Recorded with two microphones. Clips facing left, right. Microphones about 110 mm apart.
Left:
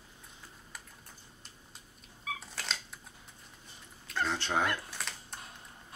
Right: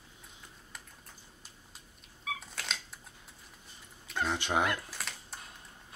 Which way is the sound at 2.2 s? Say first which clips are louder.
Even; centre (ahead or behind).